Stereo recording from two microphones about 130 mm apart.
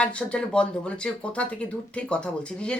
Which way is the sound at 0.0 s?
10° left (ahead or behind).